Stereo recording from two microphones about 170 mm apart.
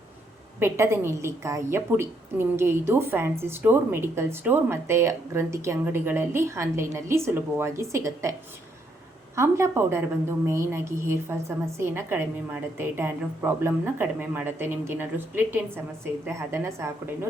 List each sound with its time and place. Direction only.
0.6 s a woman's voice: 15° right (ahead or behind)